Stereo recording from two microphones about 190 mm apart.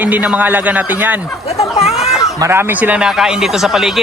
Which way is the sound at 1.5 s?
35° left (ahead or behind).